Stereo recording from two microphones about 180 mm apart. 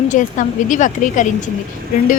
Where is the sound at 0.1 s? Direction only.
45° left (ahead or behind).